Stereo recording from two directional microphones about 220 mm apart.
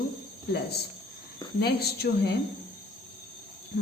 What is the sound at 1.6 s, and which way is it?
Speech, 45° left (ahead or behind).